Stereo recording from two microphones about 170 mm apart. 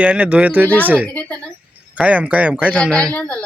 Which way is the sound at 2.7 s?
5° left (ahead or behind).